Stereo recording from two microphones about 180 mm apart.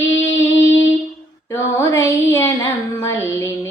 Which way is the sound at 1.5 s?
15° left (ahead or behind).